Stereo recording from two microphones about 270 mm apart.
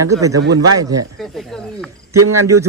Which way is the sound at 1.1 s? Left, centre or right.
Centre.